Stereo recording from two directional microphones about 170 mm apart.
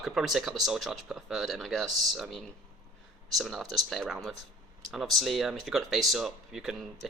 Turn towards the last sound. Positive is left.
turn(degrees=0)  # may be behind; listen again after turning